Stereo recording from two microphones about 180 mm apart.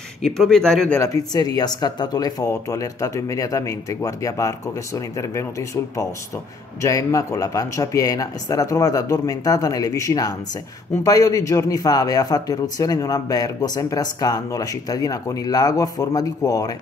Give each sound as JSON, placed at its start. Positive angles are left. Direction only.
{"t": 0.2, "sound": "speech", "side_deg": 5}
{"t": 0.9, "sound": "a man's voice", "side_deg": 20}